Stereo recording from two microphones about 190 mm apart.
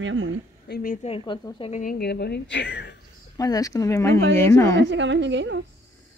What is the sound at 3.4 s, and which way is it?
A woman's voice, 20° left (ahead or behind).